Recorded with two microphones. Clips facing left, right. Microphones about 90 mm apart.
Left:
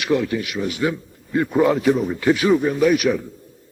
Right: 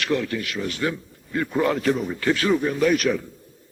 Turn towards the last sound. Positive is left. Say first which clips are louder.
# left 3 dB
turn(degrees=10)  # may be behind; listen again after turning